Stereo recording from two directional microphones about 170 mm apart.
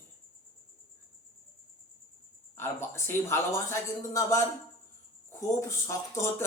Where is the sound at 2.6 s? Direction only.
15° left (ahead or behind).